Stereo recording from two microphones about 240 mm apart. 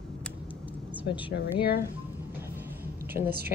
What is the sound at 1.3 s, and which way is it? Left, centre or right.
Speech, left.